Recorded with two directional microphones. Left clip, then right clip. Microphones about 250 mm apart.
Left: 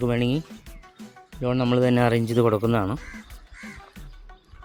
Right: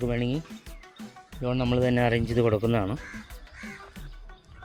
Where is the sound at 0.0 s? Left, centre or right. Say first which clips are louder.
Left 5 dB; left.